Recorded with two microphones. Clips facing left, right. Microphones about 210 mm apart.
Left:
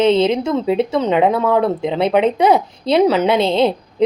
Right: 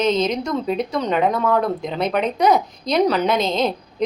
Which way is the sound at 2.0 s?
25° left (ahead or behind).